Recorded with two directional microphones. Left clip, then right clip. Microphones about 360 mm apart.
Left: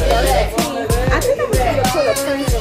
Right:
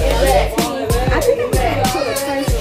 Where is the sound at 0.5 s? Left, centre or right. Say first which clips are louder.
Even; centre.